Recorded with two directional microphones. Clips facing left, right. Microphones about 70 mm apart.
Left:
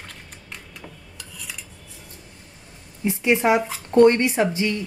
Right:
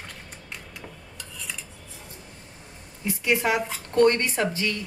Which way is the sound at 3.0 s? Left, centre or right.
Left.